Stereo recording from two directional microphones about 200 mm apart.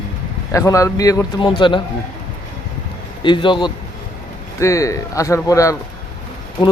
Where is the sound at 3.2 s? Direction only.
25° left (ahead or behind).